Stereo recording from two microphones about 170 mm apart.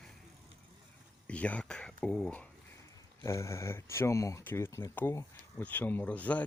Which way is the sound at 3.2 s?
15° left (ahead or behind).